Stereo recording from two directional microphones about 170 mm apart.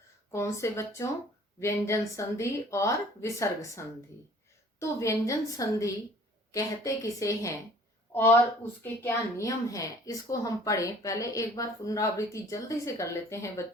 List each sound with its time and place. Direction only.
0.3 s a woman's voice: 15° left (ahead or behind)